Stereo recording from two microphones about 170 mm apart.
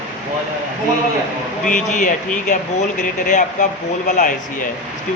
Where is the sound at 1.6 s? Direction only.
50° left (ahead or behind).